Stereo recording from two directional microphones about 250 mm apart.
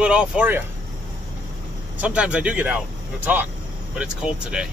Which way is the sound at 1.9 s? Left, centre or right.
Centre.